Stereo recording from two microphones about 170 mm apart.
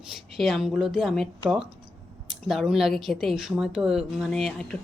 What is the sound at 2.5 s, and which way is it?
A woman's voice, centre (ahead or behind).